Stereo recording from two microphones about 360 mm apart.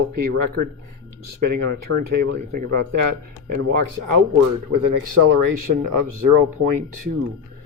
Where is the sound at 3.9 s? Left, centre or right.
Right.